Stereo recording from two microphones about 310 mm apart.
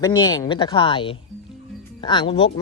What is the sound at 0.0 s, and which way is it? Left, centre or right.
Speech, centre.